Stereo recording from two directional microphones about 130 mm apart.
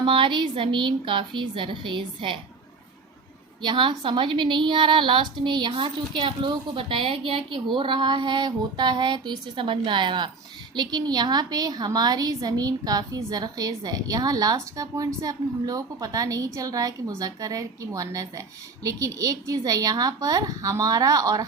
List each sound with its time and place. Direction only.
0.0 s a woman's voice: 40° right (ahead or behind)
3.6 s a woman's voice: 35° right (ahead or behind)